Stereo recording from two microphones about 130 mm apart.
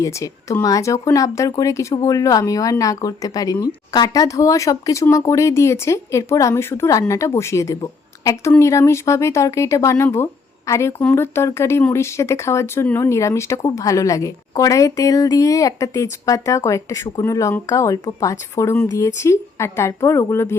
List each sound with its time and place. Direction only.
0.0 s speech: 25° left (ahead or behind)